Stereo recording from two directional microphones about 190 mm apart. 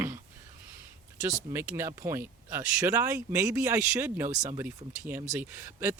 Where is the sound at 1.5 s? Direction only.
15° right (ahead or behind).